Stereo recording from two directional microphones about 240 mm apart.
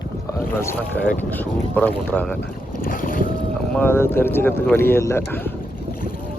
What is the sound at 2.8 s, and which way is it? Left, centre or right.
Boat, left.